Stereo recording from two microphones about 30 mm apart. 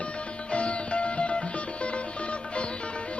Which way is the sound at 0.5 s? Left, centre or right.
Left.